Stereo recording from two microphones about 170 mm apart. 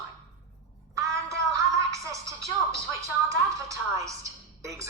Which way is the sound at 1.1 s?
20° right (ahead or behind).